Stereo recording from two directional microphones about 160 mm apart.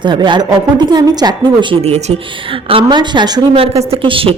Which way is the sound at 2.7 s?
30° right (ahead or behind).